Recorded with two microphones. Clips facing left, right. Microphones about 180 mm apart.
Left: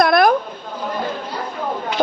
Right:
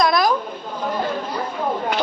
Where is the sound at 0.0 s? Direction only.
60° left (ahead or behind).